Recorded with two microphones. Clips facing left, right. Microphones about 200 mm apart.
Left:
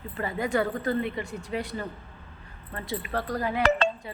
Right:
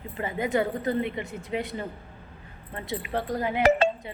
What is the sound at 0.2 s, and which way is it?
A woman's voice, 20° right (ahead or behind).